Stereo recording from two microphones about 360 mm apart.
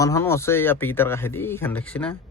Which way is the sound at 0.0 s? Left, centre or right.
Centre.